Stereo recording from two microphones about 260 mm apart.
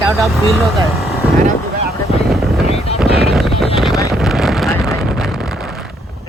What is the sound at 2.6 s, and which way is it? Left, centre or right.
Wind noise, left.